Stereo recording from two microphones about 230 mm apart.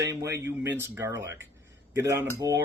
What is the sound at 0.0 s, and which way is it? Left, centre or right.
Speech, centre.